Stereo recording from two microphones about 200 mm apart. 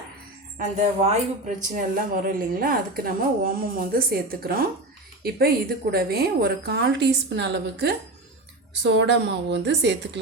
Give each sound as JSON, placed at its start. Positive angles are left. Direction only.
{"t": 0.6, "sound": "a woman's voice", "side_deg": -35}